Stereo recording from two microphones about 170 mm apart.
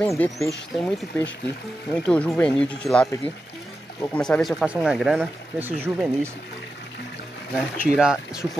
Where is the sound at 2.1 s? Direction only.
10° left (ahead or behind); by 6.1 s 5° right (ahead or behind).